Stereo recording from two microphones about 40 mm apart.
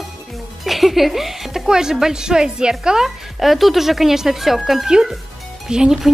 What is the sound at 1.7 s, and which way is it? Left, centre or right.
A woman's voice, centre.